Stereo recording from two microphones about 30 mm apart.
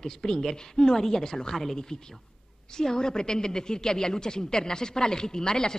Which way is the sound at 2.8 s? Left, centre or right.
Left.